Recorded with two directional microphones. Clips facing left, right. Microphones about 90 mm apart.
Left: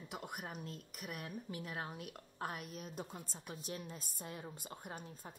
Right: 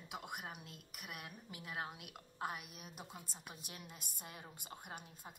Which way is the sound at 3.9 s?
35° left (ahead or behind).